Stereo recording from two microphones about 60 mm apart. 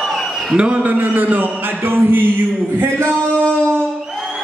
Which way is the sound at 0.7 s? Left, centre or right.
Right.